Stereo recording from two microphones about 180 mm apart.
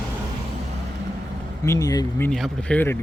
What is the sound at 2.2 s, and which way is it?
Speech, 5° left (ahead or behind).